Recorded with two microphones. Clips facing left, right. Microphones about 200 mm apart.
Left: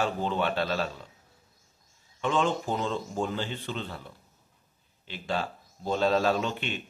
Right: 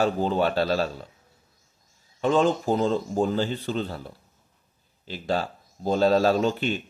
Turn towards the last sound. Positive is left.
turn(degrees=-40)  # may be behind; listen again after turning